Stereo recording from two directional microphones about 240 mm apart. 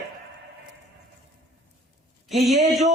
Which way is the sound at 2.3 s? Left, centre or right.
Centre.